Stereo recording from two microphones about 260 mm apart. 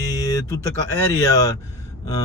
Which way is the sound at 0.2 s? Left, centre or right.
Centre.